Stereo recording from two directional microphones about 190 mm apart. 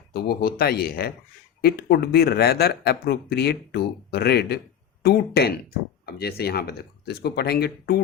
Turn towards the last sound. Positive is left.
turn(degrees=55)  # may be behind; listen again after turning